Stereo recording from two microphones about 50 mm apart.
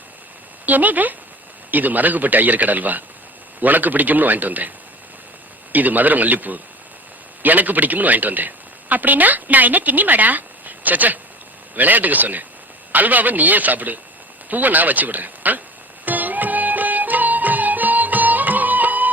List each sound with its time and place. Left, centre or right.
0.6 s speech: right
5.7 s speech: right
16.0 s music: right